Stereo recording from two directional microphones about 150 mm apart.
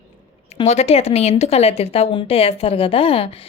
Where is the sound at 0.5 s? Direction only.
45° left (ahead or behind).